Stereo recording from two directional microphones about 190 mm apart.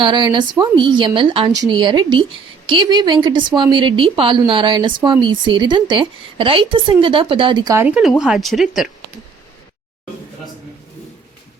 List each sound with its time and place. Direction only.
0.0 s a woman's voice: 25° right (ahead or behind); by 8.9 s centre (ahead or behind)